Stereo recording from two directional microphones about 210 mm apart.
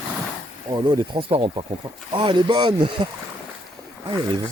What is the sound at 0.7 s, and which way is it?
Speech, 25° right (ahead or behind).